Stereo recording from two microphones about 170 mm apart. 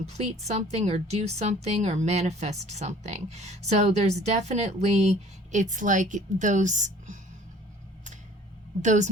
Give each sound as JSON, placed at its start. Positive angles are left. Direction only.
{"t": 0.0, "sound": "a woman's voice", "side_deg": -40}
{"t": 8.8, "sound": "a woman's voice", "side_deg": -45}